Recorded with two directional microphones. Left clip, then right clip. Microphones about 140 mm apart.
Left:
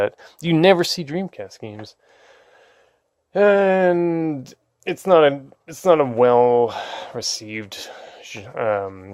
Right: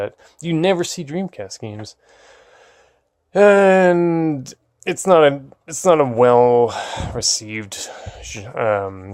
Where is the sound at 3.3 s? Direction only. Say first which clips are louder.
Right 4 dB; 10° right (ahead or behind).